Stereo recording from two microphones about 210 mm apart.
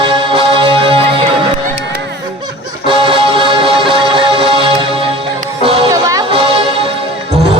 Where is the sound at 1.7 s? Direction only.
55° right (ahead or behind).